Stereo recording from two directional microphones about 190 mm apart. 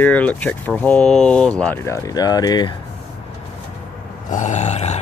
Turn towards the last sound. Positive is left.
turn(degrees=35)  # may be behind; listen again after turning